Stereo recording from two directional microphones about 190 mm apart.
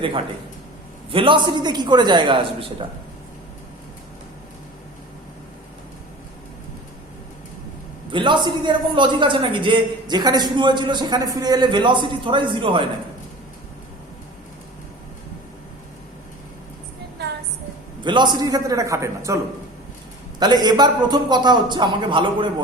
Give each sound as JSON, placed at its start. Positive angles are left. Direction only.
{"t": 1.1, "sound": "a man's voice", "side_deg": -25}
{"t": 8.1, "sound": "a man's voice", "side_deg": -25}
{"t": 18.0, "sound": "a man's voice", "side_deg": -25}
{"t": 20.4, "sound": "a man's voice", "side_deg": -20}